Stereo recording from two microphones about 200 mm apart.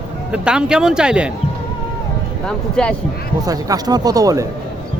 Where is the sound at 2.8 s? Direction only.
5° left (ahead or behind).